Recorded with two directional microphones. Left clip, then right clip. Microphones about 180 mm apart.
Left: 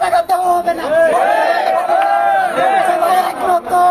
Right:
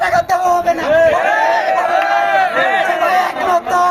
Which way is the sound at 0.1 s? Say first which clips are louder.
Even; 10° right (ahead or behind).